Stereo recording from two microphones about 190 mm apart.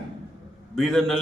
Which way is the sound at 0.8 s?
Centre (ahead or behind).